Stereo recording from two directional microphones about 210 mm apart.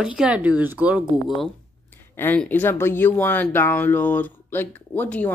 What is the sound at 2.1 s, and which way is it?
Speech, 10° left (ahead or behind).